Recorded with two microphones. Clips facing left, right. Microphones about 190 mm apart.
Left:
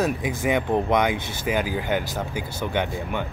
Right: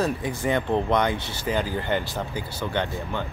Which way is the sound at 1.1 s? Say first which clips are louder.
Left 2 dB; 50° left (ahead or behind).